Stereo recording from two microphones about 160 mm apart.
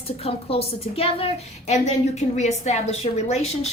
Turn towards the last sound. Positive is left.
turn(degrees=40)  # may be behind; listen again after turning